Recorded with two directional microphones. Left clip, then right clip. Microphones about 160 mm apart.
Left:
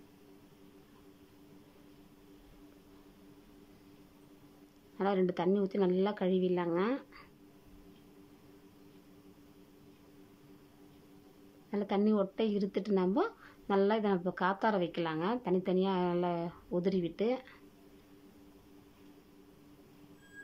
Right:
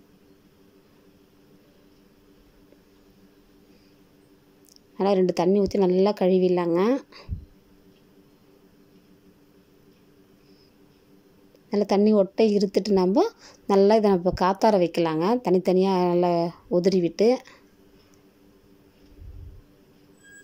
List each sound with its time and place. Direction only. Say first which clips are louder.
4.9 s a woman's voice: right 10 dB; 25° right (ahead or behind)
11.7 s a woman's voice: right 12 dB; 30° right (ahead or behind)